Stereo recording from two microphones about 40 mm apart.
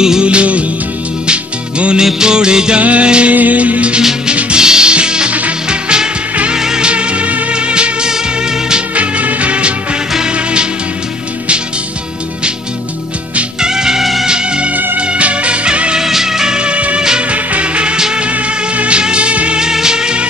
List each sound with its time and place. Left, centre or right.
0.2 s music: right
2.8 s music: right
4.3 s music: right
6.9 s music: right
13.6 s music: centre
15.0 s music: right
16.0 s music: centre; by 17.9 s right
17.9 s music: centre
18.8 s music: right
19.6 s music: centre